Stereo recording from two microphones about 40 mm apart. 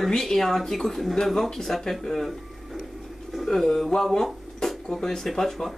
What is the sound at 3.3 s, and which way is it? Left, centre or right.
Speech, centre.